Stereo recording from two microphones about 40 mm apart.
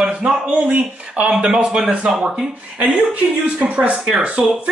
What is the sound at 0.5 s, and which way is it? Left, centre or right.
Speech, right.